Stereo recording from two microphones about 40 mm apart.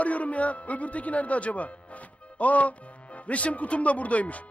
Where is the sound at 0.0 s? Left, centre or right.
Left.